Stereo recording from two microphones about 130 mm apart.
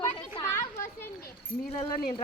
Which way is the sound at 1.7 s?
45° left (ahead or behind).